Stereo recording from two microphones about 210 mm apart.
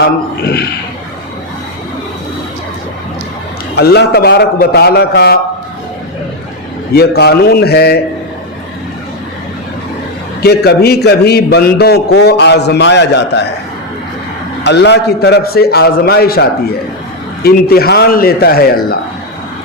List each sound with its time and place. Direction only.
0.0 s a man's voice: 50° left (ahead or behind)
3.8 s a man's voice: 50° left (ahead or behind)
6.9 s a man's voice: 50° left (ahead or behind)
10.4 s a man's voice: 50° left (ahead or behind)
14.6 s a man's voice: 55° left (ahead or behind)